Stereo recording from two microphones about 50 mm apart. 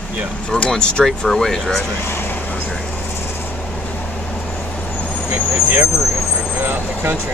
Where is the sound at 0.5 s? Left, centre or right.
Left.